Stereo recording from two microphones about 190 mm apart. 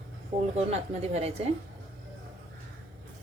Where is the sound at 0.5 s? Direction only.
35° right (ahead or behind).